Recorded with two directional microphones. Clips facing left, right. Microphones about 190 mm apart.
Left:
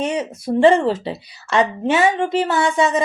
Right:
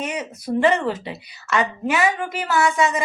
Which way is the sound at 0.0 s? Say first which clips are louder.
Left 6 dB; 30° left (ahead or behind).